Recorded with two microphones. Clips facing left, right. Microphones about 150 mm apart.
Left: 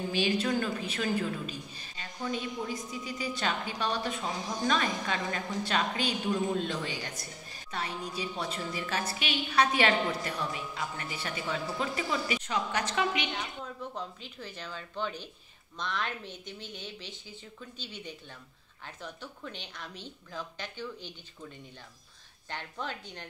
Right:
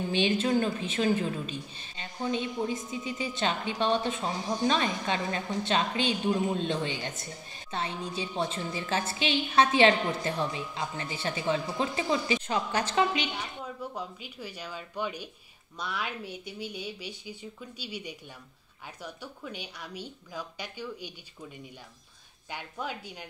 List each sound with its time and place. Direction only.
0.1 s a woman's voice: 25° right (ahead or behind)
13.9 s speech: 10° right (ahead or behind)
22.5 s speech: 10° right (ahead or behind)